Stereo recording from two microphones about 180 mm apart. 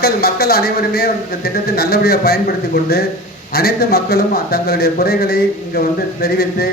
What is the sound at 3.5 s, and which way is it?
A man's voice, 60° left (ahead or behind).